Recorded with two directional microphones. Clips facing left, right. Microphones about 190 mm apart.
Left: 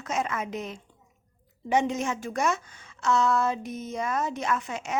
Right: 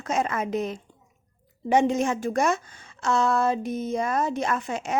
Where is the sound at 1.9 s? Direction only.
35° right (ahead or behind).